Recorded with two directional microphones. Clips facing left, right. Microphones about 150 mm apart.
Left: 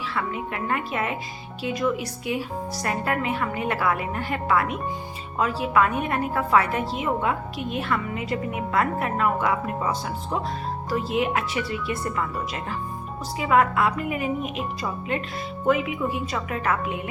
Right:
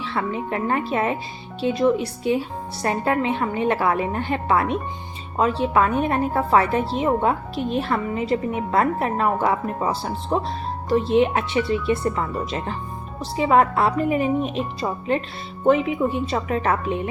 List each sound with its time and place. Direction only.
0.1 s a woman's voice: 30° right (ahead or behind)